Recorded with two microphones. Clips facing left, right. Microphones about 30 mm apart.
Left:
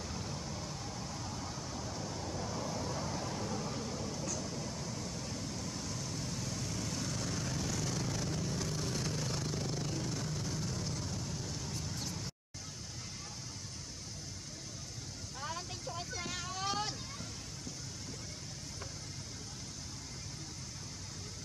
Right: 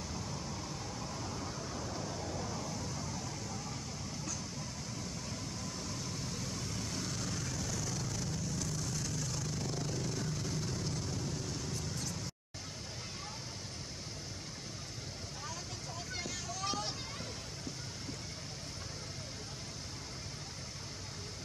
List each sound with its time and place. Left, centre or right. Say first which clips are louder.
0.1 s vehicle: even; centre; by 9.6 s left
9.6 s vehicle: even; centre
15.4 s vehicle: left 5 dB; centre